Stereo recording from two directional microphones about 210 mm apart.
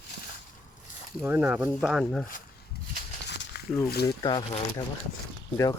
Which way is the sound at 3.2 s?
55° left (ahead or behind).